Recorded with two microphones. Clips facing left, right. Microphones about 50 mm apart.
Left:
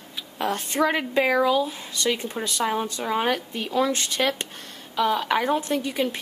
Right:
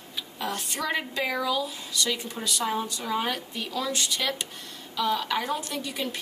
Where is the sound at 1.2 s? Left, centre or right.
Left.